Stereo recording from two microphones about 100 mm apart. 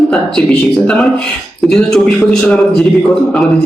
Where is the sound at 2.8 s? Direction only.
Centre (ahead or behind).